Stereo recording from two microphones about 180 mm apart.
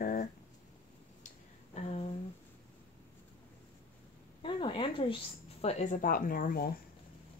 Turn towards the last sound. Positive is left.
turn(degrees=55)  # may be behind; listen again after turning